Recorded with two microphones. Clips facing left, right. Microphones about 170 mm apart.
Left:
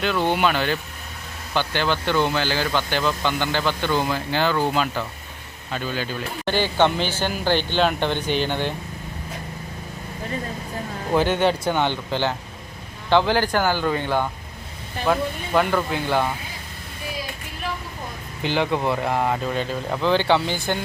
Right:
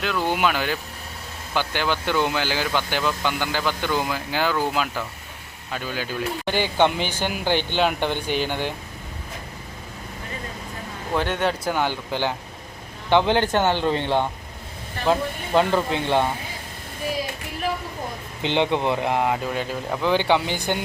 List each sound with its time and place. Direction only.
0.0 s speech: 5° right (ahead or behind)
11.1 s speech: centre (ahead or behind); by 16.3 s 25° right (ahead or behind)
18.4 s speech: 25° right (ahead or behind)